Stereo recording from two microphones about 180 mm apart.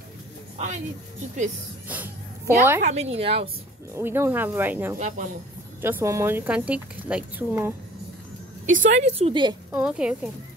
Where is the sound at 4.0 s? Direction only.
10° right (ahead or behind).